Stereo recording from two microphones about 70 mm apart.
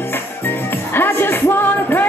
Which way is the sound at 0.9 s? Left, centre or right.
Left.